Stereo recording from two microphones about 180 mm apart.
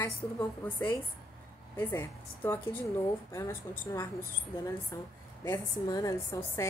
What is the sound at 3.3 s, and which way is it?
A woman's voice, 15° left (ahead or behind).